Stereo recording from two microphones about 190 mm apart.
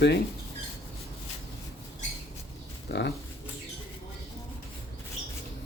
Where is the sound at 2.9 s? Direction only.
65° left (ahead or behind).